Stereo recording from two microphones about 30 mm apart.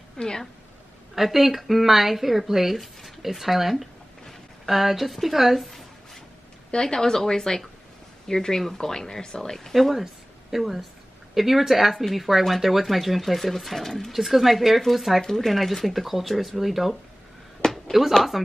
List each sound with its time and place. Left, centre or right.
0.2 s speech: left
1.1 s a woman's voice: centre
6.7 s speech: left
9.8 s speech: centre
14.1 s speech: centre
17.6 s a sound: left
18.3 s speech: centre